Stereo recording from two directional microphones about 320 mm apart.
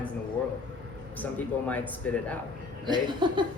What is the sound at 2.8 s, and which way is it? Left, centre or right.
Speech, centre.